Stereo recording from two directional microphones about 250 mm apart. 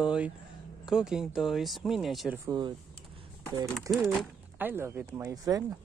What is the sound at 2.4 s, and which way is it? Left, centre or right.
Speech, centre.